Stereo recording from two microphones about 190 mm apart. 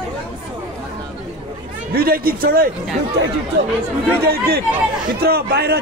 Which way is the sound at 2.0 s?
50° right (ahead or behind).